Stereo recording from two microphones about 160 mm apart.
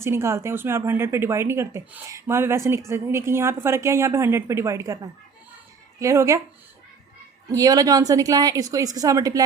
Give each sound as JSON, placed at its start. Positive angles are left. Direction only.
{"t": 0.0, "sound": "a woman's voice", "side_deg": -15}
{"t": 6.0, "sound": "a woman's voice", "side_deg": -20}
{"t": 7.5, "sound": "a woman's voice", "side_deg": -25}